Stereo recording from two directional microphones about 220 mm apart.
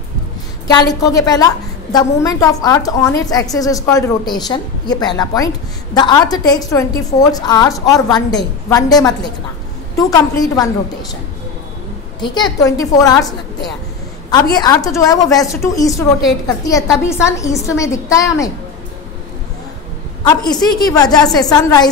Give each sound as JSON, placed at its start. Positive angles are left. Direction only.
{"t": 0.7, "sound": "a woman's voice", "side_deg": 15}
{"t": 12.2, "sound": "a woman's voice", "side_deg": 20}
{"t": 14.5, "sound": "a woman's voice", "side_deg": 15}
{"t": 20.2, "sound": "a woman's voice", "side_deg": 20}